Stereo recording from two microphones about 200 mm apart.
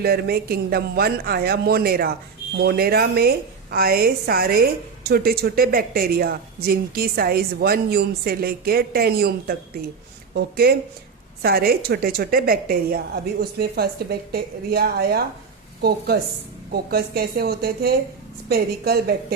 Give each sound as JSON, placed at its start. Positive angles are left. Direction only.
{"t": 0.0, "sound": "a woman's voice", "side_deg": -50}